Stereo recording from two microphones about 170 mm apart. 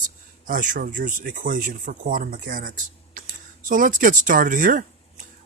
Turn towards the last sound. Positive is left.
turn(degrees=-55)  # may be behind; listen again after turning